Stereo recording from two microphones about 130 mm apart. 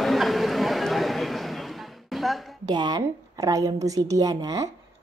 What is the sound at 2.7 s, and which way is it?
A woman's voice, 35° right (ahead or behind).